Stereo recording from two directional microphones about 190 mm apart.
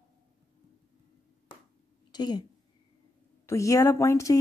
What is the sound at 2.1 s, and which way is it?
Speech, 20° left (ahead or behind).